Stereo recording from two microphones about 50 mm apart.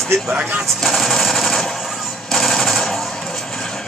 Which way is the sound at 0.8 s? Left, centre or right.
Centre.